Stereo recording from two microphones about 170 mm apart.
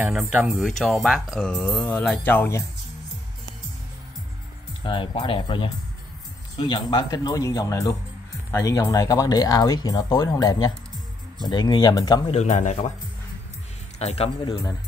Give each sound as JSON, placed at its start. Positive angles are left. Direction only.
{"t": 0.0, "sound": "speech", "side_deg": -5}
{"t": 0.7, "sound": "speech", "side_deg": 0}
{"t": 4.8, "sound": "speech", "side_deg": 30}
{"t": 12.3, "sound": "a man's voice", "side_deg": 40}
{"t": 13.9, "sound": "a man's voice", "side_deg": 40}